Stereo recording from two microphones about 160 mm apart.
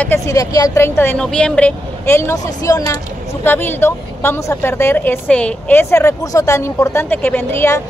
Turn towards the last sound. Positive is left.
turn(degrees=15)  # may be behind; listen again after turning